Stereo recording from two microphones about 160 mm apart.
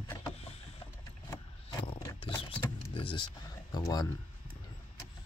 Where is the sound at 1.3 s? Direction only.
25° left (ahead or behind).